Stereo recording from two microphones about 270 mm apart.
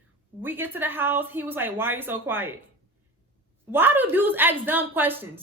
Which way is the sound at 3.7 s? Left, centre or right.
Centre.